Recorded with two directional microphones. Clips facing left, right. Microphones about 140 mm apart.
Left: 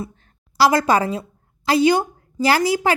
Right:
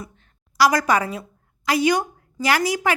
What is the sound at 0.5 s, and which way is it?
A woman's voice, 30° left (ahead or behind).